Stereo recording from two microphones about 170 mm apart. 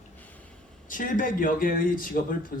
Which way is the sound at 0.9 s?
50° left (ahead or behind).